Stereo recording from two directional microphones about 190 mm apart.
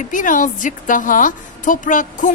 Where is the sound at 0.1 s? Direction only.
45° left (ahead or behind).